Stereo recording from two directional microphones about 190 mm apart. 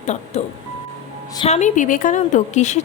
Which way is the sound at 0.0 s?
35° left (ahead or behind).